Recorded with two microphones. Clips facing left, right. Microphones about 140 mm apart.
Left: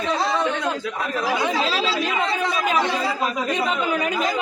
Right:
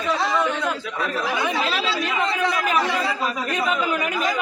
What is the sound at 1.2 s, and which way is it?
Speech, 35° left (ahead or behind).